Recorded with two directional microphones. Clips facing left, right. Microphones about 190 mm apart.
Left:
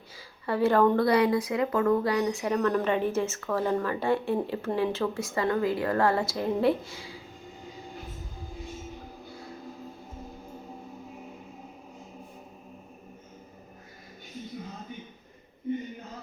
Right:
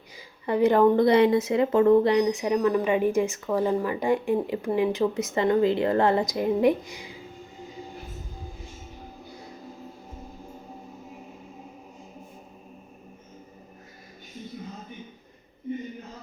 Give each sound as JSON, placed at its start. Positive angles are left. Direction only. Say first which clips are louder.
{"t": 0.4, "sound": "speech", "louder": "right 3 dB", "side_deg": -20}